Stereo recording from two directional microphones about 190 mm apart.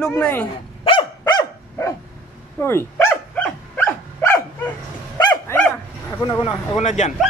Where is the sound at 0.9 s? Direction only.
30° left (ahead or behind).